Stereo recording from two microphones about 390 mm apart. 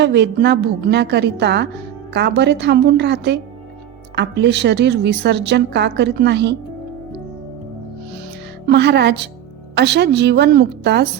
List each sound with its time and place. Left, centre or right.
0.0 s a woman's voice: right
8.6 s a woman's voice: right